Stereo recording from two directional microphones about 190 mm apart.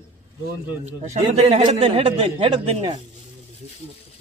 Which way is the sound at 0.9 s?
35° right (ahead or behind).